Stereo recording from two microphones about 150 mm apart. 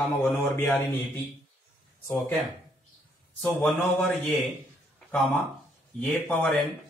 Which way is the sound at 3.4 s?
5° left (ahead or behind).